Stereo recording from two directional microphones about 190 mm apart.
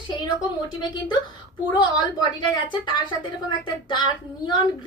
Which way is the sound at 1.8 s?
25° left (ahead or behind).